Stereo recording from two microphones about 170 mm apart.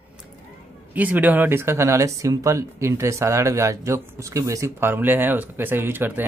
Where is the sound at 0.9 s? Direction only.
10° right (ahead or behind).